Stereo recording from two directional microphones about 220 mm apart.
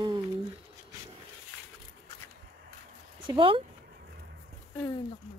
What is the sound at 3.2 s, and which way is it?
Speech, 25° right (ahead or behind).